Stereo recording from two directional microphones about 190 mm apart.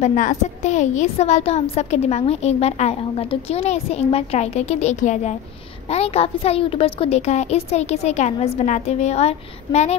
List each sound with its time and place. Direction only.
0.0 s a woman's voice: 40° left (ahead or behind)